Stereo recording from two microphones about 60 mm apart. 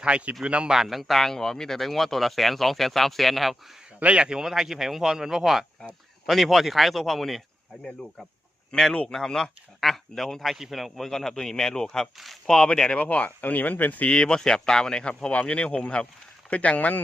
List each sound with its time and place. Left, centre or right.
0.0 s a man's voice: centre
4.0 s speech: centre
4.4 s a man's voice: centre
8.7 s speech: centre
12.1 s a man's voice: centre
12.5 s speech: centre; by 14.1 s left
14.1 s speech: centre